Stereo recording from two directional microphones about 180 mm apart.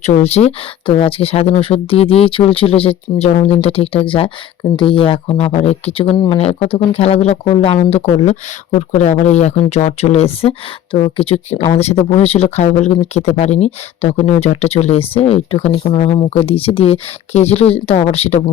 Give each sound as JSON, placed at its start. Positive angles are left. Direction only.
{"t": 0.0, "sound": "speech", "side_deg": 35}